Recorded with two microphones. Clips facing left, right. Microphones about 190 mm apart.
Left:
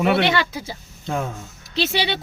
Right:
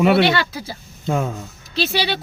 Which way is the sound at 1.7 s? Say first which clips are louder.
Right 1 dB; 20° left (ahead or behind).